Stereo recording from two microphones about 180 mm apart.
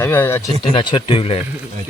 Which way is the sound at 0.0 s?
10° left (ahead or behind).